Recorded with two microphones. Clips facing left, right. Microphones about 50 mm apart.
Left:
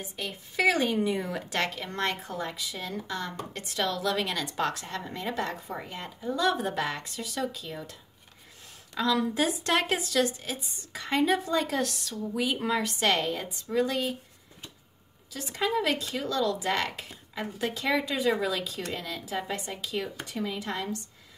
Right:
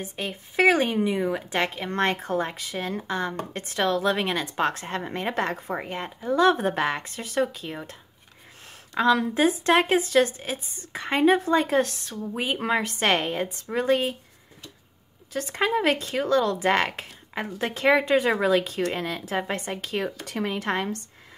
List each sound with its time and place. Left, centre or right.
0.0 s a woman's voice: right
0.9 s speech: right
1.9 s a woman's voice: right
8.9 s a woman's voice: right
15.3 s a woman's voice: right
20.2 s speech: right